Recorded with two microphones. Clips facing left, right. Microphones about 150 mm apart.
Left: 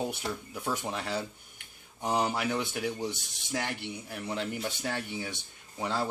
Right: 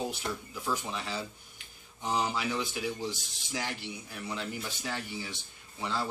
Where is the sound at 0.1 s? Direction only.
55° left (ahead or behind).